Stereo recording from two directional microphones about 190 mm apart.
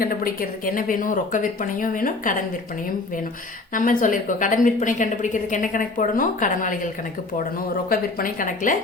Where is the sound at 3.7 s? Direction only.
45° left (ahead or behind).